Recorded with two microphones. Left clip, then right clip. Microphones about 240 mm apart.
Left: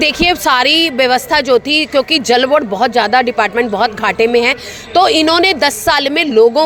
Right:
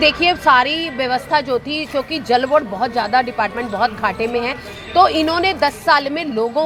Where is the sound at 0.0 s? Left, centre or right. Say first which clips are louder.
Left 2 dB; left.